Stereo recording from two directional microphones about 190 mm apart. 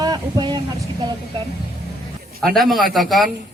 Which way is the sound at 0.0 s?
20° right (ahead or behind).